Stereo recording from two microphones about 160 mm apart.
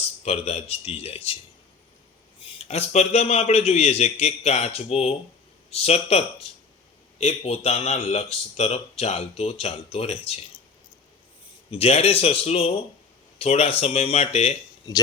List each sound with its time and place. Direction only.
0.3 s speech: 40° left (ahead or behind)
2.6 s speech: 45° left (ahead or behind)
11.7 s speech: 40° left (ahead or behind)